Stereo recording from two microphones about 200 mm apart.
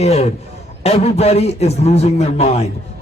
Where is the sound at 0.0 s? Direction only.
30° left (ahead or behind).